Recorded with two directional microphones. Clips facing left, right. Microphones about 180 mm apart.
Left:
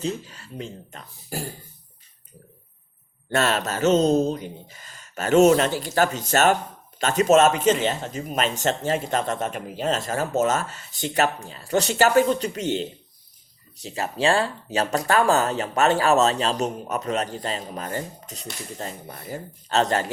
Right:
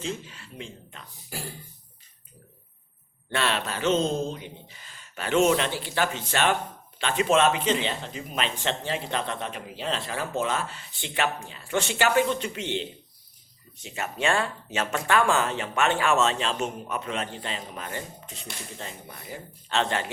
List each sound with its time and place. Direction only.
0.0 s speech: 40° left (ahead or behind)
3.2 s speech: 45° left (ahead or behind)